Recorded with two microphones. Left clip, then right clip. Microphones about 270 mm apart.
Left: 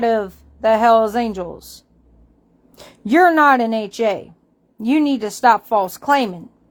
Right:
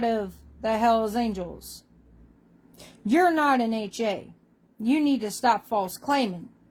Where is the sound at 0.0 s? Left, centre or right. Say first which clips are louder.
Left 9 dB; left.